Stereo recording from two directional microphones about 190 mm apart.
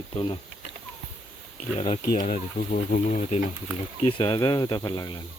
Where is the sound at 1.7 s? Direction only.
35° left (ahead or behind).